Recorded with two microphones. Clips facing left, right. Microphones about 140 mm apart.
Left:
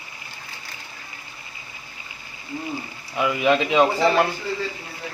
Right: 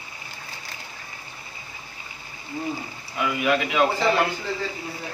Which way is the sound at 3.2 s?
20° left (ahead or behind).